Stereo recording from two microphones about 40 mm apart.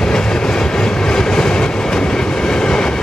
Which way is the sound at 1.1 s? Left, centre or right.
Centre.